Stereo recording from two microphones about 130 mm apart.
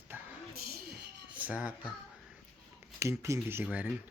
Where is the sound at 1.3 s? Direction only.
10° right (ahead or behind).